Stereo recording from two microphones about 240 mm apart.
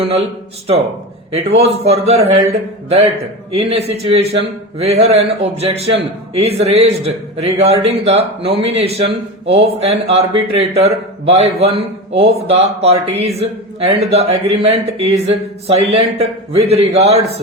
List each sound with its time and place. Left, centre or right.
0.0 s a man's voice: right
1.3 s a man's voice: right